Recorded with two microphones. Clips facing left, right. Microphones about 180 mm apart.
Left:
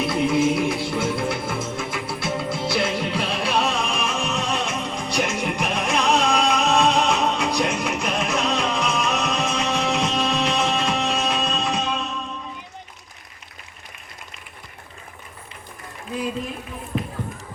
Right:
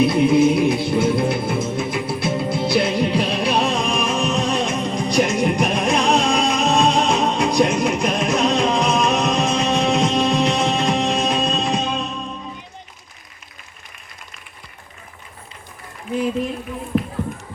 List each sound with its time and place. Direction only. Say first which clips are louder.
0.1 s music: right 5 dB; 20° right (ahead or behind)
3.7 s music: right 4 dB; 35° right (ahead or behind)
16.9 s run: right 6 dB; 25° right (ahead or behind)